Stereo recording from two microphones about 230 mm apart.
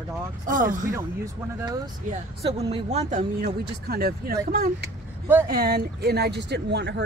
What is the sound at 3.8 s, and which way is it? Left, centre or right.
Speech, right.